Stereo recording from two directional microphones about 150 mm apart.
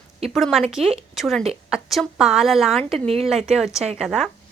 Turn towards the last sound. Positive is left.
turn(degrees=0)  # may be behind; listen again after turning